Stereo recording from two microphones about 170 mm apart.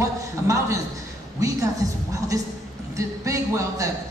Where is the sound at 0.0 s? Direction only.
20° right (ahead or behind).